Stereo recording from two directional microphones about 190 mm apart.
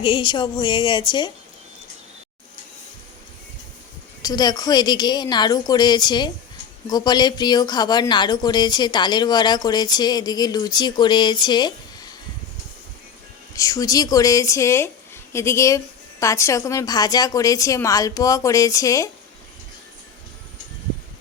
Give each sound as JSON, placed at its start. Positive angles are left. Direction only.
{"t": 0.0, "sound": "speech", "side_deg": 25}
{"t": 4.2, "sound": "speech", "side_deg": 20}
{"t": 13.5, "sound": "a woman's voice", "side_deg": 20}